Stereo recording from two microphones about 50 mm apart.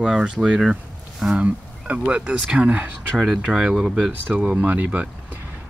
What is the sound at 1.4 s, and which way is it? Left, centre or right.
Speech, right.